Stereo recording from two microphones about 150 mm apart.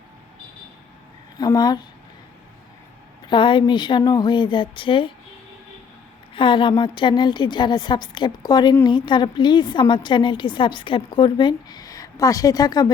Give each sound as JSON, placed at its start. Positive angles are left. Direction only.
{"t": 1.4, "sound": "speech", "side_deg": 25}
{"t": 3.2, "sound": "a woman's voice", "side_deg": 35}
{"t": 6.3, "sound": "a woman's voice", "side_deg": 35}